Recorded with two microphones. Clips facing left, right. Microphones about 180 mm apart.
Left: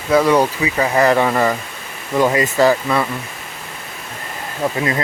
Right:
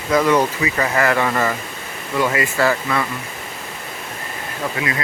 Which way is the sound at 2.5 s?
15° left (ahead or behind).